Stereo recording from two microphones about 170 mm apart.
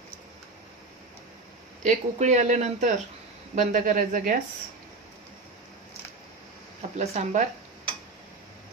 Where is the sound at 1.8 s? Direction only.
45° right (ahead or behind).